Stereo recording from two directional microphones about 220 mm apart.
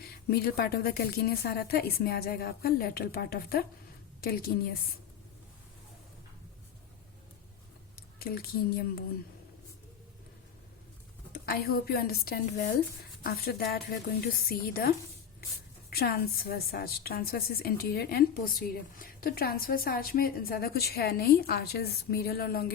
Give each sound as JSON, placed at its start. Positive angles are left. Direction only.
{"t": 0.3, "sound": "a woman's voice", "side_deg": 45}
{"t": 8.2, "sound": "a woman's voice", "side_deg": 45}
{"t": 11.3, "sound": "a woman's voice", "side_deg": 45}